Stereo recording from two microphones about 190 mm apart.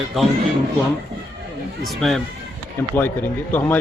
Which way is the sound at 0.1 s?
Centre (ahead or behind).